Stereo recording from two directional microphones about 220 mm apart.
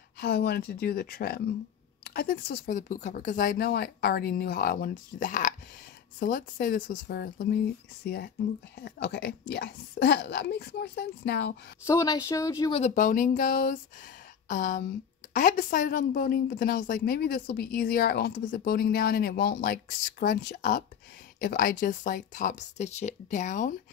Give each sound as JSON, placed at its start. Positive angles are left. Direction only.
{"t": 0.2, "sound": "speech", "side_deg": 45}
{"t": 11.8, "sound": "speech", "side_deg": 15}
{"t": 12.8, "sound": "speech", "side_deg": 35}